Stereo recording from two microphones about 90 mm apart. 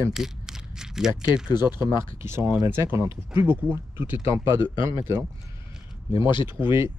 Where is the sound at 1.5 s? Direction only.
55° left (ahead or behind).